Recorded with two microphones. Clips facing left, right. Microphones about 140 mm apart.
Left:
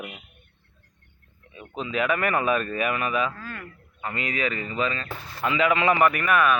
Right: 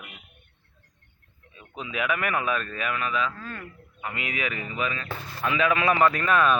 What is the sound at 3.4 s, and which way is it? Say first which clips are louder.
Speech: even; 25° right (ahead or behind).